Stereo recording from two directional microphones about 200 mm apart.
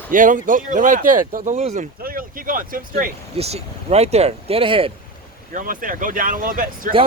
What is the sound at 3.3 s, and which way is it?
Speech, 30° right (ahead or behind).